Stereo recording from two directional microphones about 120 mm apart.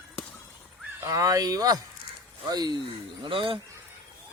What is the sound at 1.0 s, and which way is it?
Speech, 30° right (ahead or behind).